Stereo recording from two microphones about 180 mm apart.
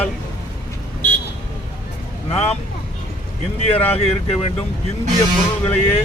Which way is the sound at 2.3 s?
35° left (ahead or behind).